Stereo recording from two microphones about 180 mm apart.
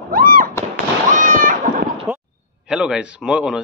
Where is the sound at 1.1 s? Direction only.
45° right (ahead or behind).